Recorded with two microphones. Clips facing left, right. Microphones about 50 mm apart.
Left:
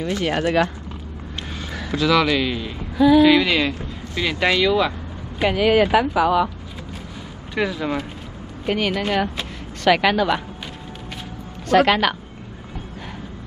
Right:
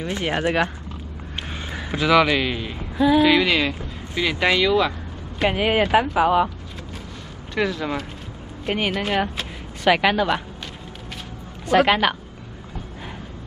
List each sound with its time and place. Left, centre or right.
0.0 s speech: right; by 4.9 s centre
5.5 s speech: centre
7.5 s speech: centre
8.9 s a woman's voice: centre
11.6 s a woman's voice: centre